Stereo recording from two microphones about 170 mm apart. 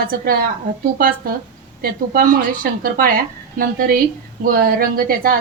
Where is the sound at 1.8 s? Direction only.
60° right (ahead or behind).